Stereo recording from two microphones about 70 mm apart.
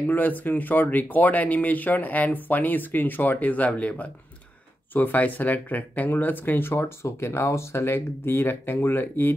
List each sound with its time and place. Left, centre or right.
0.1 s speech: left